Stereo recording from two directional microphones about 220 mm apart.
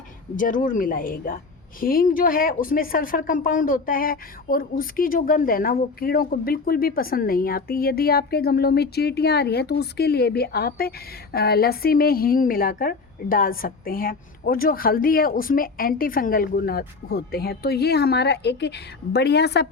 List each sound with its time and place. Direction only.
0.3 s speech: 35° left (ahead or behind)